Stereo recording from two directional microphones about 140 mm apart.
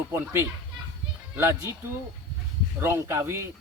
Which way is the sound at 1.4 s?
15° right (ahead or behind).